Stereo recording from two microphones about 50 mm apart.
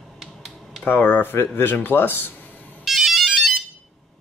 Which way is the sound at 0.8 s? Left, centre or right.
Left.